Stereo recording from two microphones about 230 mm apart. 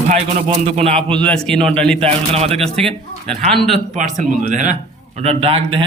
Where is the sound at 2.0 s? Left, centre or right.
Right.